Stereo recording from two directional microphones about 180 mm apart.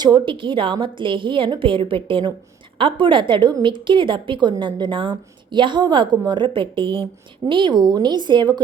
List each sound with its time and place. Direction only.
0.0 s a woman's voice: 25° right (ahead or behind)